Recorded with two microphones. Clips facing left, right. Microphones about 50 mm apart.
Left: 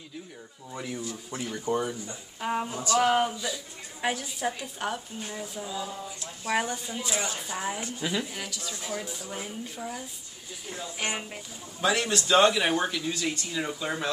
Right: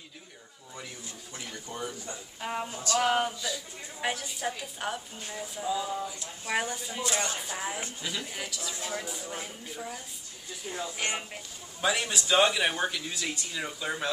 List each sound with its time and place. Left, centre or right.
1.3 s speech: left
2.4 s speech: centre
7.1 s speech: centre
8.0 s speech: centre
8.3 s speech: centre
11.8 s speech: centre